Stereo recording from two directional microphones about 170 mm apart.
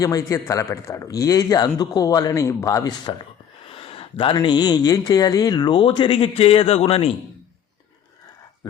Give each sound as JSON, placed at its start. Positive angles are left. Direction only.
{"t": 0.0, "sound": "speech", "side_deg": 20}
{"t": 3.7, "sound": "speech", "side_deg": 35}